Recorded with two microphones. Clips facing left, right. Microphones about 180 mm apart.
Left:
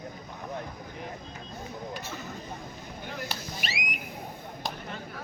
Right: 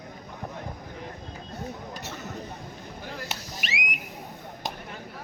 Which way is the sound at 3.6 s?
40° left (ahead or behind).